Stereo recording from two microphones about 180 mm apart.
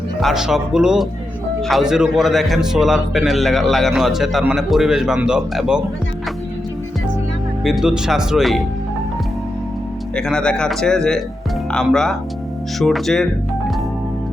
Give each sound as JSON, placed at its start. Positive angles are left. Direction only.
{"t": 0.2, "sound": "a man's voice", "side_deg": 0}
{"t": 7.6, "sound": "a man's voice", "side_deg": 0}
{"t": 10.2, "sound": "a man's voice", "side_deg": 5}